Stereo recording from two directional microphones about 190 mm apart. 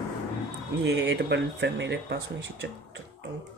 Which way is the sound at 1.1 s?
65° right (ahead or behind).